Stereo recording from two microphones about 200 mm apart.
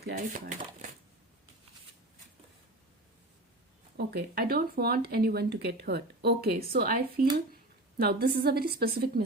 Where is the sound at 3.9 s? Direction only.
50° right (ahead or behind).